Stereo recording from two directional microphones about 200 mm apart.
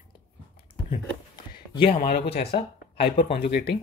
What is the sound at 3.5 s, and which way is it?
Speech, 55° left (ahead or behind).